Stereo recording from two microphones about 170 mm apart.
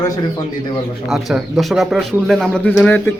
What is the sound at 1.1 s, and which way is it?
Speech, centre (ahead or behind).